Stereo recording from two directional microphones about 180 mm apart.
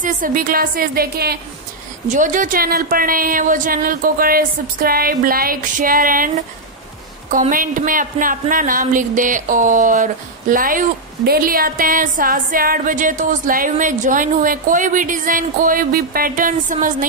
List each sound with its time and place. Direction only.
0.0 s a woman's voice: 50° right (ahead or behind)
2.0 s a woman's voice: 45° right (ahead or behind)